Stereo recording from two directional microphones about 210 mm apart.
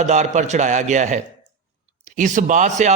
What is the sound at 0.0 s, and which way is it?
A man's voice, 35° right (ahead or behind).